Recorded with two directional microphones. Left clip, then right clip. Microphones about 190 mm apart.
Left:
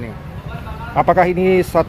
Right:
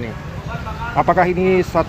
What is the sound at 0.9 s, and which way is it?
Speech, 50° left (ahead or behind).